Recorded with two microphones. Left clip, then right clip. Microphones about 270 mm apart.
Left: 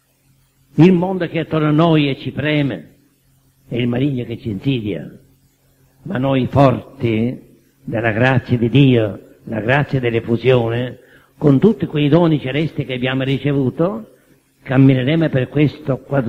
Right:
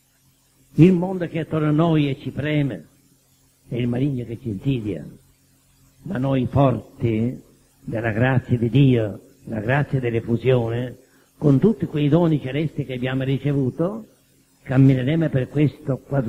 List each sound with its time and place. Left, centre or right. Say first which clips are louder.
0.8 s a man's voice: left 5 dB; left
6.0 s a man's voice: left 6 dB; left